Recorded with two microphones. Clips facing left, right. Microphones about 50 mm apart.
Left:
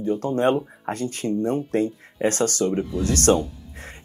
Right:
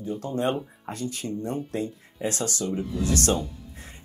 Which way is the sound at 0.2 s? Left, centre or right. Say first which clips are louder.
Left 4 dB; left.